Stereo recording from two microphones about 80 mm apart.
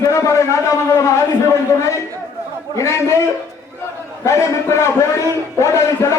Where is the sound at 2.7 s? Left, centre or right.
Left.